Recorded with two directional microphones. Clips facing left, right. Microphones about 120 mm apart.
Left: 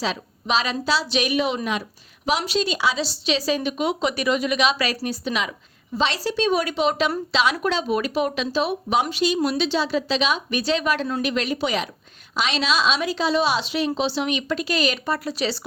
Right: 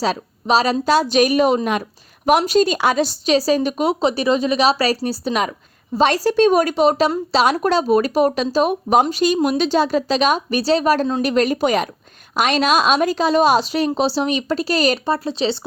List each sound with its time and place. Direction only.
0.0 s speech: 40° right (ahead or behind)
15.0 s speech: 30° right (ahead or behind)